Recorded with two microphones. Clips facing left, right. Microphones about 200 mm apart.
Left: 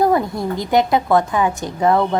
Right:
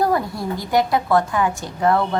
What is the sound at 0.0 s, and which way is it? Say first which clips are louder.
A woman's voice: left 4 dB; 20° left (ahead or behind).